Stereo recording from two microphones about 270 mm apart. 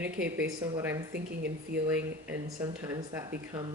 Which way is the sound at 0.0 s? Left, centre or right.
Right.